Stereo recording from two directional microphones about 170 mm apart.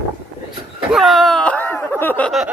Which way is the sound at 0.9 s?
Centre (ahead or behind).